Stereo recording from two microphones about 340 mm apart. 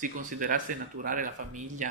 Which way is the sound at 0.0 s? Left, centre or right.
Right.